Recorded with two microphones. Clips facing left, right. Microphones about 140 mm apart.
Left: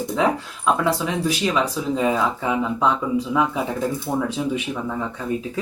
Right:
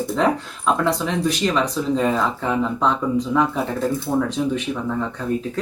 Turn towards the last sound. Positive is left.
turn(degrees=10)  # may be behind; listen again after turning